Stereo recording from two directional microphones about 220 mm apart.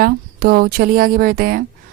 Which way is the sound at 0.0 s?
45° right (ahead or behind).